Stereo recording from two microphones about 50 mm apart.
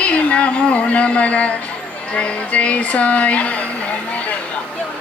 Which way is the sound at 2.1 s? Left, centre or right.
Left.